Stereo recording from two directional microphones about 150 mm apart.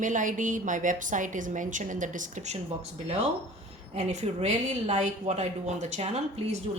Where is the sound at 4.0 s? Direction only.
50° right (ahead or behind).